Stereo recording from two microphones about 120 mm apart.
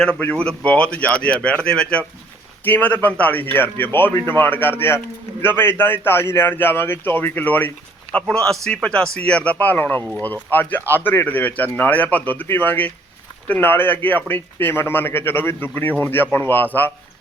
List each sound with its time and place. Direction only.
0.0 s speech: 10° left (ahead or behind)